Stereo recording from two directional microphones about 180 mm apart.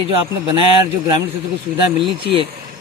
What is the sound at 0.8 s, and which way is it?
A man's voice, 25° right (ahead or behind).